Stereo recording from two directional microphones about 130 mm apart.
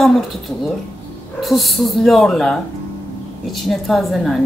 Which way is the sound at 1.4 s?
Centre (ahead or behind).